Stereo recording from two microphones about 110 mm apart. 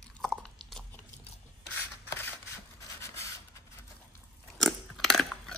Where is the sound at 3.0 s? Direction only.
25° left (ahead or behind).